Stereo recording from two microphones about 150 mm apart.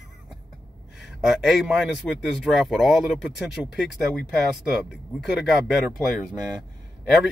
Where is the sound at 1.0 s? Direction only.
Centre (ahead or behind).